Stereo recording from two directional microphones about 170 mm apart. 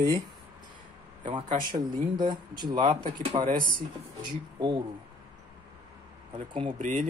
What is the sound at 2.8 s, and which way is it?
Speech, 50° right (ahead or behind).